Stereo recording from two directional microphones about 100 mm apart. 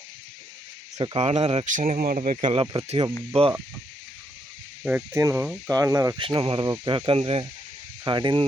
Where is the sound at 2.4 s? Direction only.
55° right (ahead or behind).